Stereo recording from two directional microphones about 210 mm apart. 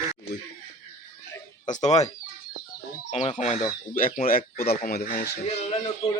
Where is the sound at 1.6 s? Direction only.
35° left (ahead or behind).